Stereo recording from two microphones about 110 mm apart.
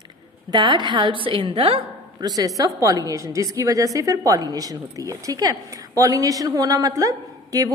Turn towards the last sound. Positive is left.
turn(degrees=-35)  # may be behind; listen again after turning